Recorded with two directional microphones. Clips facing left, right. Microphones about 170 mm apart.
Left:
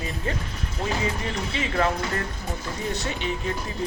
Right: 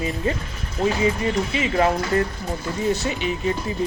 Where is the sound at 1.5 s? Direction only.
5° right (ahead or behind).